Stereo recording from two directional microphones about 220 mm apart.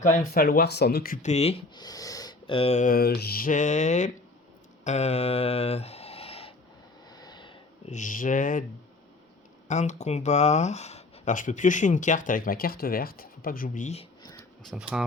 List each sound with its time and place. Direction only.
0.2 s speech: 40° left (ahead or behind); by 6.5 s 25° left (ahead or behind)
7.2 s a sound: 20° left (ahead or behind)
7.9 s speech: 35° left (ahead or behind)
9.6 s speech: 30° left (ahead or behind)
14.7 s speech: centre (ahead or behind)